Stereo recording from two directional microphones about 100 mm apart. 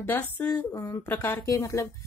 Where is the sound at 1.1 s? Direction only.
20° left (ahead or behind).